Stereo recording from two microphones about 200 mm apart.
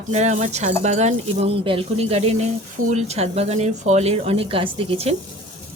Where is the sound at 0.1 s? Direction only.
35° right (ahead or behind).